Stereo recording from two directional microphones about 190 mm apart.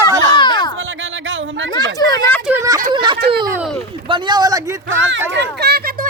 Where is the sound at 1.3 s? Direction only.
80° right.